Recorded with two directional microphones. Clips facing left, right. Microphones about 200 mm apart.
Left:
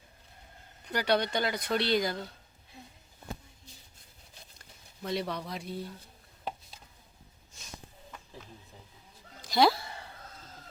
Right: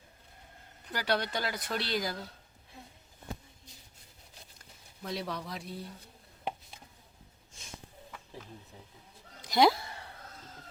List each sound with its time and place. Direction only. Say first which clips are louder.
0.9 s speech: left 4 dB; centre (ahead or behind)
5.0 s speech: left 3 dB; centre (ahead or behind)
9.4 s a sound: even; 20° right (ahead or behind)